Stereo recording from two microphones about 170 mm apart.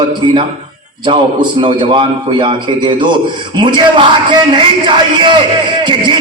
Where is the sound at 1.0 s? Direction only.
25° right (ahead or behind).